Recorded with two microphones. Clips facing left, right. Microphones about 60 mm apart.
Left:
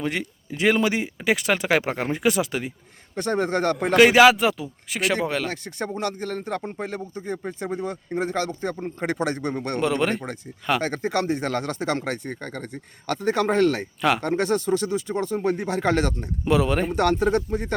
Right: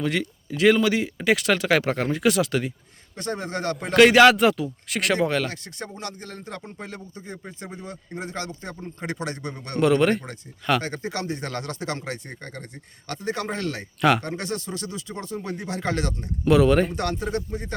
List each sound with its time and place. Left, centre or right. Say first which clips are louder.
0.0 s speech: right 2 dB; left
1.2 s speech: right 1 dB; centre
3.2 s speech: left 6 dB; left
3.9 s speech: even; centre
5.9 s speech: left 8 dB; left
9.9 s speech: right 4 dB; centre
10.8 s speech: left 5 dB; left
13.5 s speech: left 9 dB; left
16.5 s speech: right 4 dB; centre
17.5 s speech: left 6 dB; left